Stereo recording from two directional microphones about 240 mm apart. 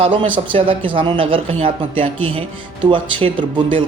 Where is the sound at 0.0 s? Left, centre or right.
Right.